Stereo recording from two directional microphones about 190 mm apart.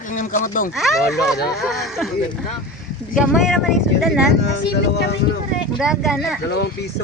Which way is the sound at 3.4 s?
Centre (ahead or behind).